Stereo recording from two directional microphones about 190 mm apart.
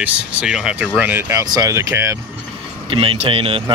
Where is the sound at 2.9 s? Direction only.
30° right (ahead or behind).